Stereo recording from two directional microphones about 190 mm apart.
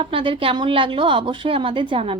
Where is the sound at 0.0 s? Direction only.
30° right (ahead or behind).